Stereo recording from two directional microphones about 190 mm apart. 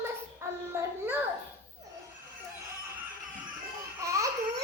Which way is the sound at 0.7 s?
10° right (ahead or behind).